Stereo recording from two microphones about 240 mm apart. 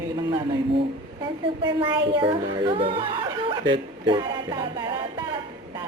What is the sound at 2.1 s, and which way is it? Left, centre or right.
Speech, right.